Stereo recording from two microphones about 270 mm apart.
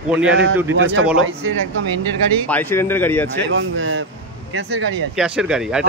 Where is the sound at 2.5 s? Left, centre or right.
Centre.